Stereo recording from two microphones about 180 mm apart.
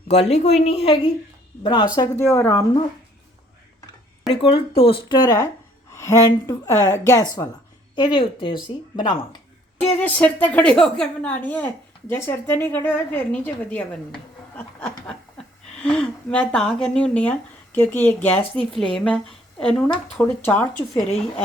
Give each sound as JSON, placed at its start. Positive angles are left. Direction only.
{"t": 0.1, "sound": "a woman's voice", "side_deg": 35}
{"t": 4.3, "sound": "a woman's voice", "side_deg": 30}
{"t": 10.0, "sound": "a woman's voice", "side_deg": 10}
{"t": 14.5, "sound": "snicker", "side_deg": 5}
{"t": 15.8, "sound": "a woman's voice", "side_deg": 5}